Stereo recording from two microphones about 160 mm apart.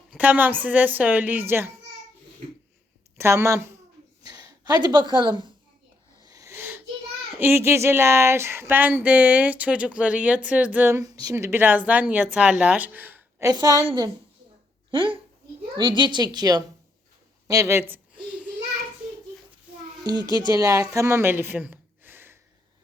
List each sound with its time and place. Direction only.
0.1 s speech: 10° right (ahead or behind)
3.2 s a woman's voice: 15° right (ahead or behind)
6.2 s wheeze: 20° right (ahead or behind)
7.3 s speech: 15° right (ahead or behind)
13.5 s a woman's voice: 25° right (ahead or behind)
17.5 s a sound: 20° right (ahead or behind)
20.1 s a woman's voice: 25° right (ahead or behind)
20.9 s a sound: 15° right (ahead or behind)